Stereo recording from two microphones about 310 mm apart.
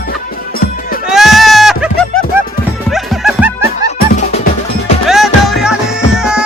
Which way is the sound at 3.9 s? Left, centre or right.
Left.